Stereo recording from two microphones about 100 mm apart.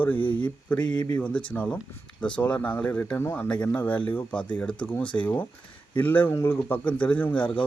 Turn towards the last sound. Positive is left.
turn(degrees=15)  # may be behind; listen again after turning